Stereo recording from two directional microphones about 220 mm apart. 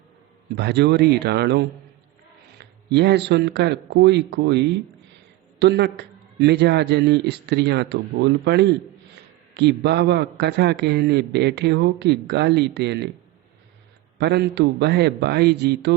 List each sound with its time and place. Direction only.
0.5 s a man's voice: 50° right (ahead or behind)
14.2 s a man's voice: 50° right (ahead or behind)